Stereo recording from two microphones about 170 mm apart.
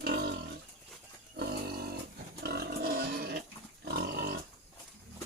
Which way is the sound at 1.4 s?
65° right (ahead or behind).